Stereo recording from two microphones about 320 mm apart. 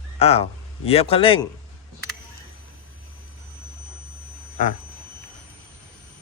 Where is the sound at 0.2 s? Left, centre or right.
Centre.